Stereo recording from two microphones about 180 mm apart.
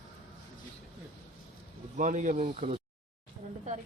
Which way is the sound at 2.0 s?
45° right (ahead or behind).